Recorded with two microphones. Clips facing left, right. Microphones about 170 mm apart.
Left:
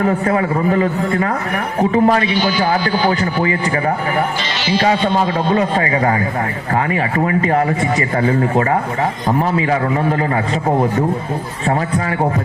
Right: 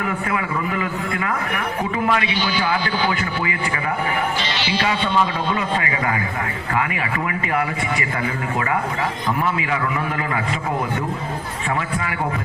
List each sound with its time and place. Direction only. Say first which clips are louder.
0.0 s a man's voice: left 8 dB; 40° left (ahead or behind)
4.6 s a man's voice: left 8 dB; 45° left (ahead or behind)